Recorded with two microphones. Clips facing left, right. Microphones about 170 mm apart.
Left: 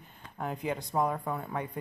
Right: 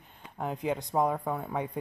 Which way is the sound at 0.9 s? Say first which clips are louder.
Right 2 dB; 10° right (ahead or behind).